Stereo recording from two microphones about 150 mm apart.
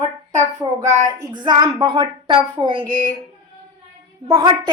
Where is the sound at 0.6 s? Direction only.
25° right (ahead or behind).